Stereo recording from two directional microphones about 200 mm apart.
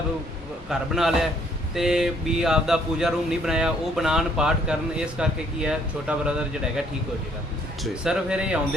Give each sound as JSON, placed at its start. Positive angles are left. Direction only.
{"t": 0.7, "sound": "speech", "side_deg": 0}
{"t": 8.0, "sound": "speech", "side_deg": -5}